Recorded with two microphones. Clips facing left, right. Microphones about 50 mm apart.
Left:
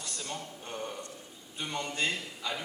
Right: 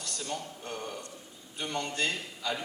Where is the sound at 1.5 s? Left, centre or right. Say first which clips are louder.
Right 1 dB; centre.